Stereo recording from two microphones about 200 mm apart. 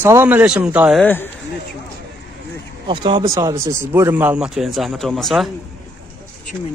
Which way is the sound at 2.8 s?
25° right (ahead or behind).